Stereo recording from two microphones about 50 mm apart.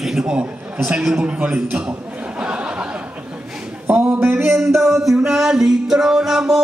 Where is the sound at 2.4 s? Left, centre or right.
Right.